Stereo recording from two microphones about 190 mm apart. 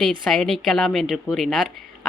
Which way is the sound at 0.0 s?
Centre (ahead or behind).